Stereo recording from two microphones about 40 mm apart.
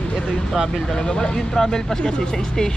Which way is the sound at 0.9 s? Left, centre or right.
Centre.